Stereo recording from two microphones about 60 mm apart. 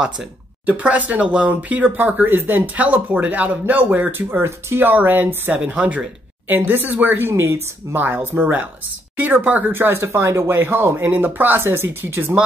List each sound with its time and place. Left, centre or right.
0.7 s speech: right
4.4 s speech: right
4.8 s speech: right
6.5 s speech: right
9.8 s speech: right
10.5 s speech: right